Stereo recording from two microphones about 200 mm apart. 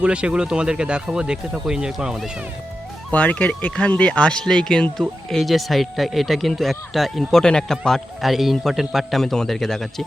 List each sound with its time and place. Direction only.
0.0 s speech: 5° right (ahead or behind)
3.1 s speech: 5° left (ahead or behind)